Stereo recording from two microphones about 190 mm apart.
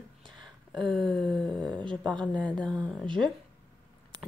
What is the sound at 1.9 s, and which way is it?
Speech, 5° left (ahead or behind).